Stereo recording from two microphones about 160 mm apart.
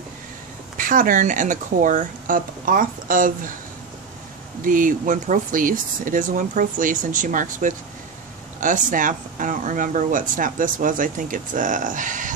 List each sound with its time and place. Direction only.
0.7 s speech: 55° right (ahead or behind)
4.6 s speech: 55° right (ahead or behind)